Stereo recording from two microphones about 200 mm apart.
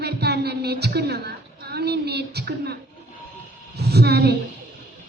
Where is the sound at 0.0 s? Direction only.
55° right (ahead or behind).